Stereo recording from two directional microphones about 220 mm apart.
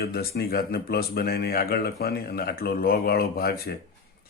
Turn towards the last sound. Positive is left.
turn(degrees=45)  # may be behind; listen again after turning